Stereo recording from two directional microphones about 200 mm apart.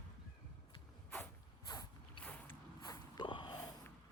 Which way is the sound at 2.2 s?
15° left (ahead or behind).